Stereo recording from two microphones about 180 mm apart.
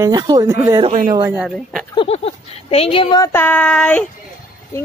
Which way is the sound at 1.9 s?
30° left (ahead or behind).